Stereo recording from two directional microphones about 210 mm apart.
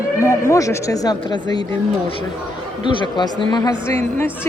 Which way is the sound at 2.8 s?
20° left (ahead or behind).